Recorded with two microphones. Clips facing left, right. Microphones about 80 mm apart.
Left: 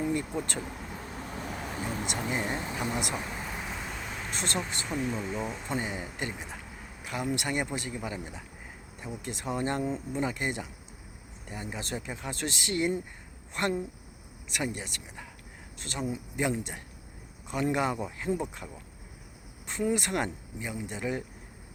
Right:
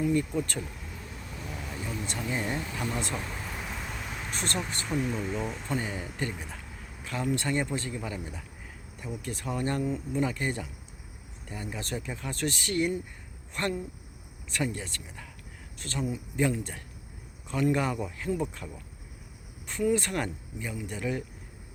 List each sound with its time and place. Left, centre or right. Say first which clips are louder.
0.0 s speech: right 3 dB; left
0.9 s vehicle: left 4 dB; left
2.1 s a sound: right 1 dB; left; by 4.3 s centre
4.3 s speech: even; centre
4.9 s speech: right 3 dB; centre
5.6 s speech: even; centre